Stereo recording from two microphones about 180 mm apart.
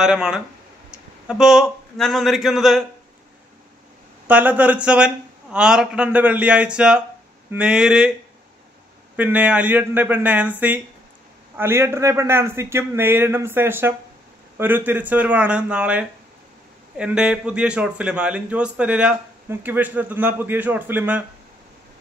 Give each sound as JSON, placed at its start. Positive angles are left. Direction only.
{"t": 0.0, "sound": "a man's voice", "side_deg": -5}
{"t": 4.3, "sound": "a man's voice", "side_deg": -10}
{"t": 9.1, "sound": "a man's voice", "side_deg": -10}